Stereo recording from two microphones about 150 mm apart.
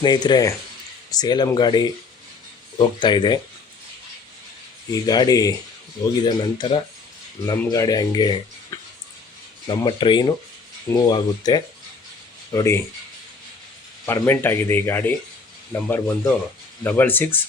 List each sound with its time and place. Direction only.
0.0 s speech: 30° left (ahead or behind)
5.0 s speech: 25° left (ahead or behind)
8.7 s a sound: 20° left (ahead or behind)
9.6 s speech: 30° left (ahead or behind)
14.1 s speech: 15° left (ahead or behind)